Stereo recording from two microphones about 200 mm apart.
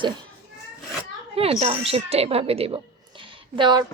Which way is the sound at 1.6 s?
30° right (ahead or behind).